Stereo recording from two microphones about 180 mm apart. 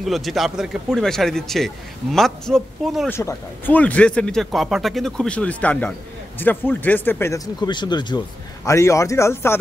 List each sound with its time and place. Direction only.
0.0 s speech: centre (ahead or behind)
3.1 s speech: 15° left (ahead or behind)